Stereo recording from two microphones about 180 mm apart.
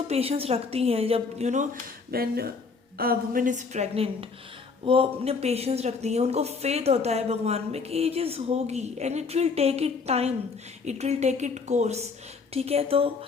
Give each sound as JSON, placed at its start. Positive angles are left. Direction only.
{"t": 0.1, "sound": "a woman's voice", "side_deg": -35}
{"t": 2.0, "sound": "a woman's voice", "side_deg": -60}